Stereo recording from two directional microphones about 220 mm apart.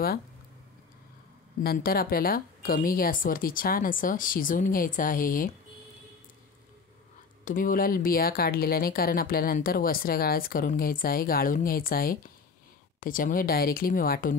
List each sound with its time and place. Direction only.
1.6 s speech: 45° left (ahead or behind)
7.4 s speech: 35° left (ahead or behind)